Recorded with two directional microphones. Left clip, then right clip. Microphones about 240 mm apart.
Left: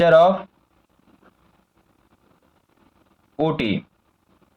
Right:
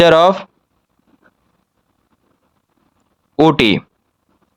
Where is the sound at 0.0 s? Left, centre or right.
Right.